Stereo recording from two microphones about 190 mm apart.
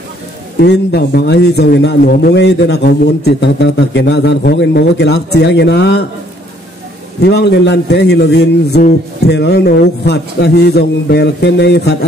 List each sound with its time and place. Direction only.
0.6 s a man's voice: 60° left (ahead or behind)
7.2 s a man's voice: 60° left (ahead or behind)